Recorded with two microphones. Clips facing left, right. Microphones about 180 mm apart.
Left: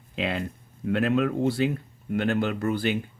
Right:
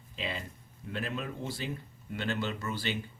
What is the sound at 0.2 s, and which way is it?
Speech, 70° left (ahead or behind).